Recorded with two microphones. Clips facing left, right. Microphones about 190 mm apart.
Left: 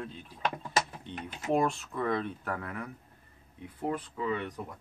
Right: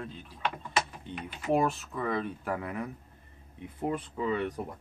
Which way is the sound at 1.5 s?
5° right (ahead or behind).